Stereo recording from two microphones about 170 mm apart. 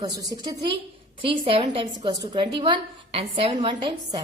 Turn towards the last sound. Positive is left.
turn(degrees=-25)  # may be behind; listen again after turning